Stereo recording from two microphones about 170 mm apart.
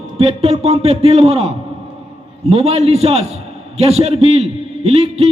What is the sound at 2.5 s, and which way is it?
A man's voice, 35° right (ahead or behind).